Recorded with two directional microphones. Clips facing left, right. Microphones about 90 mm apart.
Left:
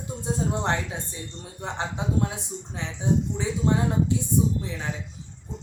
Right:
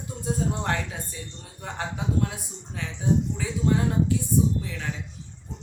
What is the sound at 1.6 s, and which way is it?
Speech, 25° left (ahead or behind).